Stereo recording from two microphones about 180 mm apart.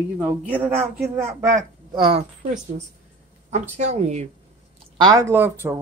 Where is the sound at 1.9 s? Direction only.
30° right (ahead or behind).